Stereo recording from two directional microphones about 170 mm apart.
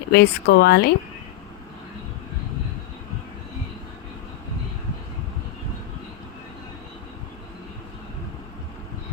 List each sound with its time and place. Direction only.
0.1 s speech: 75° left (ahead or behind)